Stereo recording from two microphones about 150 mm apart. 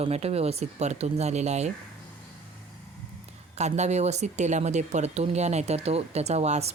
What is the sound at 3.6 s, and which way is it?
Speech, 50° right (ahead or behind).